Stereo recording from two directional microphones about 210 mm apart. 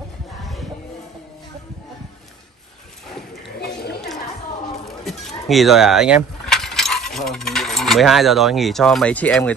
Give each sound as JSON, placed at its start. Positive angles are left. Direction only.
{"t": 3.5, "sound": "chatter", "side_deg": 50}
{"t": 4.8, "sound": "vehicle", "side_deg": 0}